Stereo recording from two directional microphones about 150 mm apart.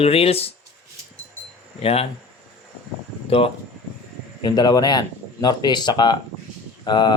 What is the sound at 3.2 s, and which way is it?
Speech, 40° left (ahead or behind).